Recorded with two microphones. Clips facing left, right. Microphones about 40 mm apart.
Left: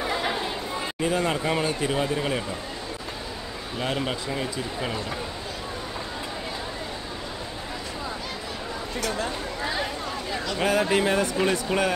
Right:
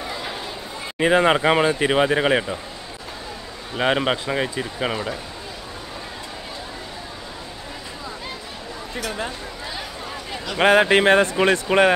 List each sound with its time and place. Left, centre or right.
0.1 s chatter: left
0.9 s speech: right
3.7 s speech: right
10.3 s a sound: centre
10.6 s speech: right